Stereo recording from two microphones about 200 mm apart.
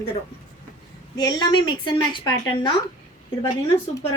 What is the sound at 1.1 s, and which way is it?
A woman's voice, 20° left (ahead or behind).